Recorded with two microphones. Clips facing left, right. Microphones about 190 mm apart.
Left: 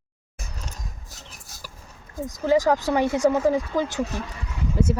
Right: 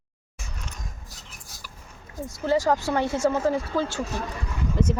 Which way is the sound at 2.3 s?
15° left (ahead or behind).